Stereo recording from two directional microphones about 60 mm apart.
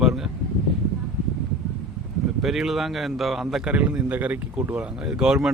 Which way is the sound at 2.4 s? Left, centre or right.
Centre.